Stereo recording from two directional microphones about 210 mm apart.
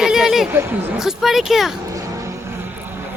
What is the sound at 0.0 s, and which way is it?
Speech, centre (ahead or behind).